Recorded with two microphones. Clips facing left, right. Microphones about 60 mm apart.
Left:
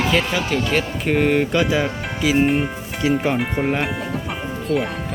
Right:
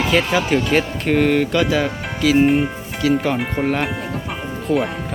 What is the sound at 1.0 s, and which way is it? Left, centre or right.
Speech, centre.